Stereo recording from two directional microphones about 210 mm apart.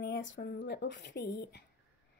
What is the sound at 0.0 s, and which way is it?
A woman's voice, 60° left (ahead or behind).